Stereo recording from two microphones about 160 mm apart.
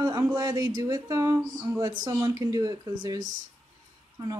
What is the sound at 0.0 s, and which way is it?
Speech, 25° right (ahead or behind).